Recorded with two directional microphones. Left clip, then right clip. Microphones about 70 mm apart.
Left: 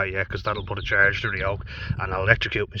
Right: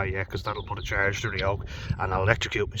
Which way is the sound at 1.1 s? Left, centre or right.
Right.